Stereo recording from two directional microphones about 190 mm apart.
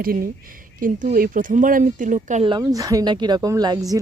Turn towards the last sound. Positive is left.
turn(degrees=-20)  # may be behind; listen again after turning